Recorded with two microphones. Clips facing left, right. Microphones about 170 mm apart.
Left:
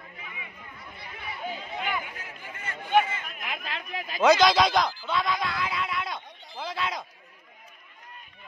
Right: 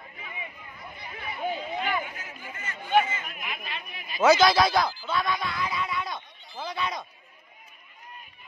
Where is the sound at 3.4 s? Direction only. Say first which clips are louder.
Left 2 dB; 90° left.